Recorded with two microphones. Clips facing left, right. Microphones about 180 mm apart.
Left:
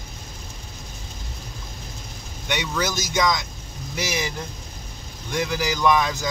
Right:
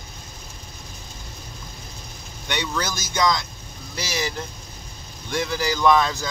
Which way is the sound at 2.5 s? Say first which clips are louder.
Left 1 dB; 15° left (ahead or behind).